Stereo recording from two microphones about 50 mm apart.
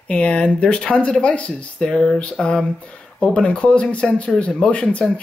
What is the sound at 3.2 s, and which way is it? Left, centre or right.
Speech, centre.